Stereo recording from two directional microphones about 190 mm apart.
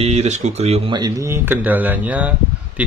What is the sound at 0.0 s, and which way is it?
Speech, 35° right (ahead or behind).